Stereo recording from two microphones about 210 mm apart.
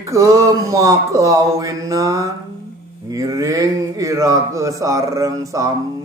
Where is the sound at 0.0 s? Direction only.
15° right (ahead or behind).